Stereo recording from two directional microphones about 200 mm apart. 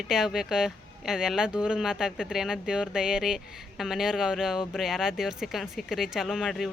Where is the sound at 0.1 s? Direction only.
Centre (ahead or behind).